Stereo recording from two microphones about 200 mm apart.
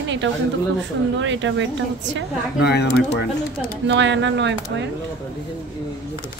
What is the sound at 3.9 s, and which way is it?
Speech, 65° right (ahead or behind).